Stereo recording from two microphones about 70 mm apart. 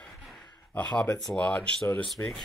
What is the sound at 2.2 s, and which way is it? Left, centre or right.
Speech, left.